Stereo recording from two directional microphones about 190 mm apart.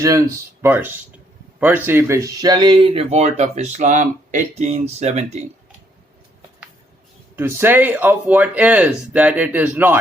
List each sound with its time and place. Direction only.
0.0 s speech: 15° right (ahead or behind); by 5.4 s 35° right (ahead or behind)
7.3 s speech: 10° right (ahead or behind)